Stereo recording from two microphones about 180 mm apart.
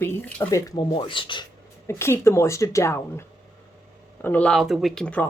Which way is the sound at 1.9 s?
15° left (ahead or behind).